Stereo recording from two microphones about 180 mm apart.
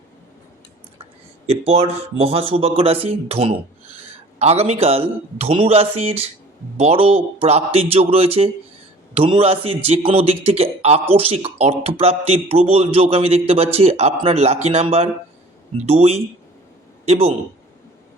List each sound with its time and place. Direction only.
1.5 s a man's voice: 35° right (ahead or behind)